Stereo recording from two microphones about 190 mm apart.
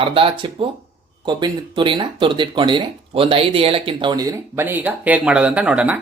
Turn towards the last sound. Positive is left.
turn(degrees=-5)  # may be behind; listen again after turning